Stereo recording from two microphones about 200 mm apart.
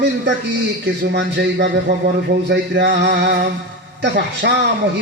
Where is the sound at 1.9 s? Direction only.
60° right (ahead or behind).